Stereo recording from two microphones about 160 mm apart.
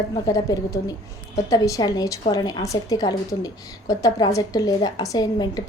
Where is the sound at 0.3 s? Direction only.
25° left (ahead or behind).